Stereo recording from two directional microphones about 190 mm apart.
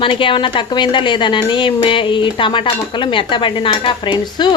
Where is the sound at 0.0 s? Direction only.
30° left (ahead or behind).